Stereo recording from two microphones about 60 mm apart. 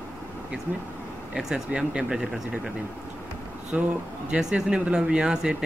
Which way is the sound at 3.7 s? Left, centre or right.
Centre.